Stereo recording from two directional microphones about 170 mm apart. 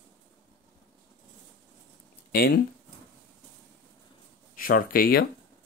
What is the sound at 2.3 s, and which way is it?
Speech, 65° left (ahead or behind).